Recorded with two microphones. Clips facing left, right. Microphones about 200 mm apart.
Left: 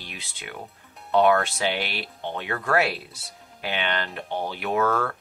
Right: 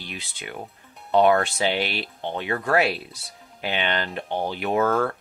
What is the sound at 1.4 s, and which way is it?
Speech, 20° right (ahead or behind).